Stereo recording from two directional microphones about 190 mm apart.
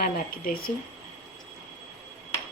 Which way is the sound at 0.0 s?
50° left (ahead or behind).